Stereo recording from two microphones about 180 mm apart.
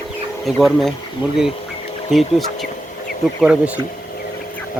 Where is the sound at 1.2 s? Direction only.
25° left (ahead or behind).